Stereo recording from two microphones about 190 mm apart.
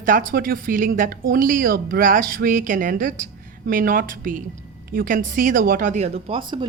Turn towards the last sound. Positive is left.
turn(degrees=-25)  # may be behind; listen again after turning